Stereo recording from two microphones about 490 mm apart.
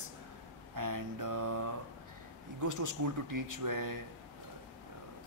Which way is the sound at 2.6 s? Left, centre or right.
Right.